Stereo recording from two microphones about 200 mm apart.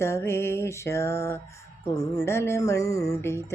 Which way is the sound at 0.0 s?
15° left (ahead or behind).